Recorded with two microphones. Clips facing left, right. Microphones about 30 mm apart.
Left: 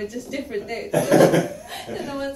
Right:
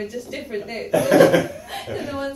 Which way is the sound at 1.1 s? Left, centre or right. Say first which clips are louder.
Right 1 dB; centre.